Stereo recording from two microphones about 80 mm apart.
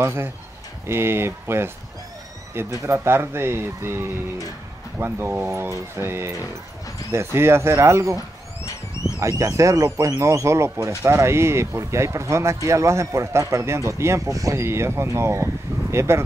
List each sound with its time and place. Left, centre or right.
0.0 s speech: right
2.8 s speech: right
9.2 s speech: right